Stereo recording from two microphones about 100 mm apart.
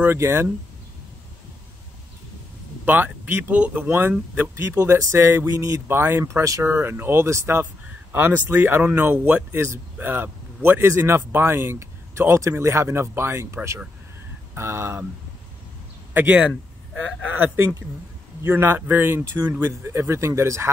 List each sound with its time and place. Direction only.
0.0 s speech: 25° right (ahead or behind)
2.8 s speech: 20° right (ahead or behind)
16.1 s speech: 15° right (ahead or behind)